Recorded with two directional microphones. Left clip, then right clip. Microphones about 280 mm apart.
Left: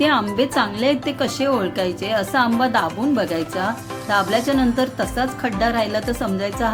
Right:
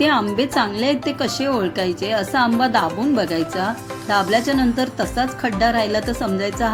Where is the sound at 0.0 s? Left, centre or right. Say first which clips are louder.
Even; centre.